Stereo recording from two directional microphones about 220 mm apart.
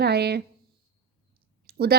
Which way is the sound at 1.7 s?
45° right (ahead or behind).